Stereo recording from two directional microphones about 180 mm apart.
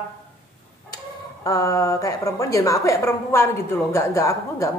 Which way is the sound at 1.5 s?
20° left (ahead or behind).